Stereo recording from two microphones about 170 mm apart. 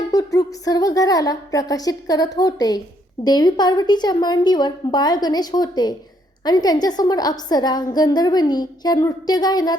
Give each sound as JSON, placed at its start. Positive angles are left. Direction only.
{"t": 0.1, "sound": "a woman's voice", "side_deg": 20}